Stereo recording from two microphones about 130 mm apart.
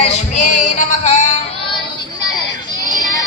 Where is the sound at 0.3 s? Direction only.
65° left (ahead or behind).